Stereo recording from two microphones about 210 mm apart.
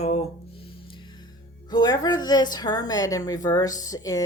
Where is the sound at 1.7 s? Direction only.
20° left (ahead or behind).